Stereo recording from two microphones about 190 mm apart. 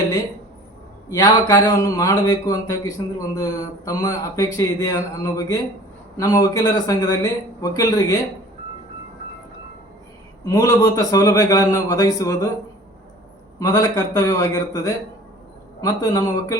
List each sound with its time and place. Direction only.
1.1 s speech: 20° left (ahead or behind)
10.4 s a man's voice: 20° left (ahead or behind)
13.6 s speech: 20° left (ahead or behind)